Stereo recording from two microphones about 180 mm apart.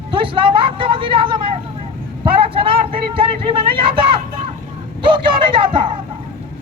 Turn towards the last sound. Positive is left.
turn(degrees=-30)  # may be behind; listen again after turning